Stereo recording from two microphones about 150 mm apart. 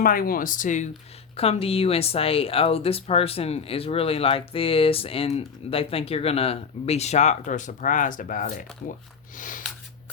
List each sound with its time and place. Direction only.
0.0 s speech: 75° left (ahead or behind); by 0.9 s 55° left (ahead or behind)
1.4 s speech: 40° left (ahead or behind); by 8.6 s 60° left (ahead or behind)
9.3 s a sound: 60° left (ahead or behind)